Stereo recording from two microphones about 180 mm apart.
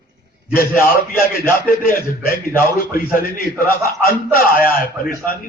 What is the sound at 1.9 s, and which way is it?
A man's voice, 55° left (ahead or behind).